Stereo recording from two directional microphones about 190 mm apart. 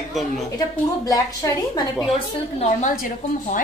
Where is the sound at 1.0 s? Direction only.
15° left (ahead or behind).